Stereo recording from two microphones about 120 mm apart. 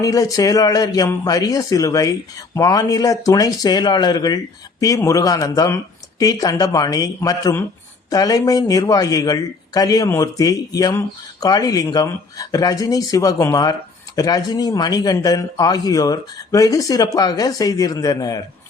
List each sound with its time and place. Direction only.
0.0 s a man's voice: 30° left (ahead or behind)